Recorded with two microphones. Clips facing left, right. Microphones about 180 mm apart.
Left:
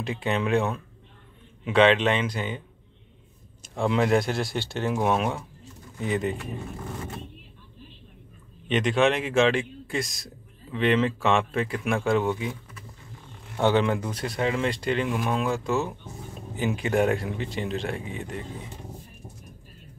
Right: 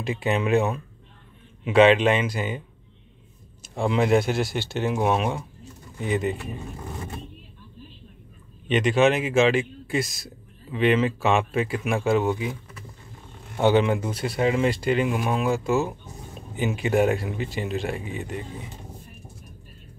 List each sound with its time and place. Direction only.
0.0 s a man's voice: 5° right (ahead or behind)
3.6 s a man's voice: 5° right (ahead or behind)
8.6 s a man's voice: 5° right (ahead or behind)
13.6 s a man's voice: 10° right (ahead or behind)